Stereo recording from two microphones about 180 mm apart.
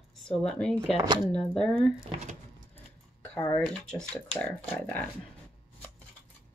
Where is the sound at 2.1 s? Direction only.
40° right (ahead or behind).